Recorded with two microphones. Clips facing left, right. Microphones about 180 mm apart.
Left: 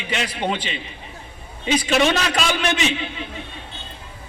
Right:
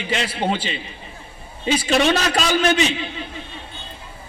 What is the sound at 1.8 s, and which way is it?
A man's voice, 40° right (ahead or behind).